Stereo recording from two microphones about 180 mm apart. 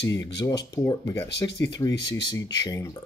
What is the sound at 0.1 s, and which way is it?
Speech, 20° left (ahead or behind).